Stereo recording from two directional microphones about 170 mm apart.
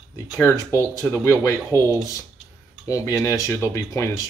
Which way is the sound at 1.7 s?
20° right (ahead or behind).